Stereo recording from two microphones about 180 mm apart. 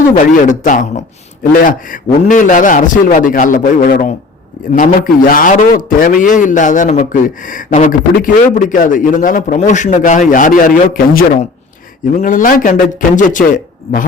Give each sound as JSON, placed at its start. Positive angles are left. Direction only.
{"t": 0.1, "sound": "a man's voice", "side_deg": 45}